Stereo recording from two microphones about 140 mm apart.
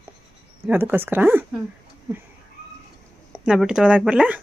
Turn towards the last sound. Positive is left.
turn(degrees=-10)  # may be behind; listen again after turning